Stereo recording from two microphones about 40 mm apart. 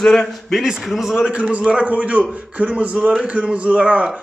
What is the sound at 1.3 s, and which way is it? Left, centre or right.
Speech, right.